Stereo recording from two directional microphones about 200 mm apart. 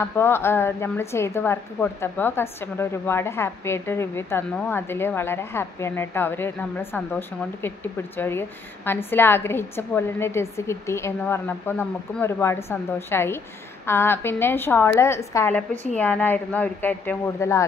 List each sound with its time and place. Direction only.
0.0 s a woman's voice: 10° left (ahead or behind)
15.7 s speech: 30° left (ahead or behind)
16.0 s a woman's voice: 10° left (ahead or behind)